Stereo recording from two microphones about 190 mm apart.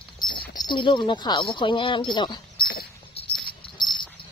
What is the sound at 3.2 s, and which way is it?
Dog, 30° left (ahead or behind).